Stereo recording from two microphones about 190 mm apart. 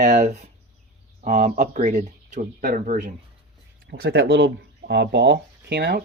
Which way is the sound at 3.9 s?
60° right (ahead or behind).